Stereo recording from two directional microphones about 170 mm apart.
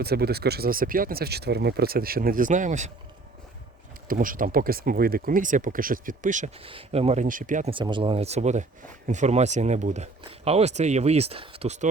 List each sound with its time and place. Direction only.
0.0 s speech: 65° right (ahead or behind); by 2.9 s 45° right (ahead or behind)
4.1 s speech: 55° right (ahead or behind)
6.6 s speech: 35° right (ahead or behind); by 7.7 s 50° right (ahead or behind)
7.7 s speech: 30° right (ahead or behind)